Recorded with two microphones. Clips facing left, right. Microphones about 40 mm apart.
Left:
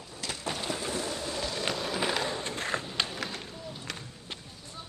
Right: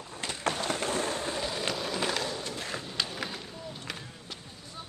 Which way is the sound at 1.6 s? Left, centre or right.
Centre.